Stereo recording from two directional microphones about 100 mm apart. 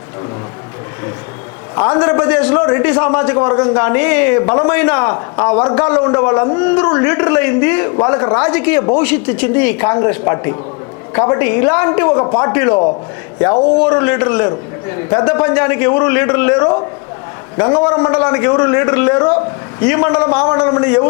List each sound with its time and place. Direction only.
1.7 s a man's voice: 20° left (ahead or behind)